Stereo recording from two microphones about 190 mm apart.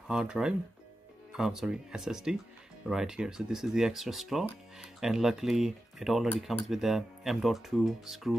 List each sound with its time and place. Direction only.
0.1 s speech: 5° right (ahead or behind)